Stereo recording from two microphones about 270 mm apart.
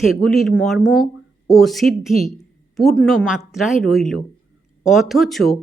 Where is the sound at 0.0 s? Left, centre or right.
Centre.